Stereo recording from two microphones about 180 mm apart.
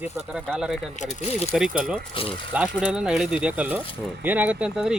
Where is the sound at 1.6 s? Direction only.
5° right (ahead or behind).